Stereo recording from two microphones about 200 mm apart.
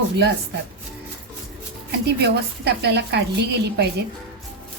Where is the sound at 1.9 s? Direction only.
55° right (ahead or behind).